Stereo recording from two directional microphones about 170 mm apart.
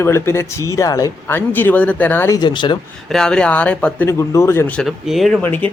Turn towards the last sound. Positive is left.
turn(degrees=10)  # may be behind; listen again after turning